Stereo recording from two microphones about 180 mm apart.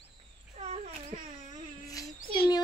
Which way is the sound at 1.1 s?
35° right (ahead or behind).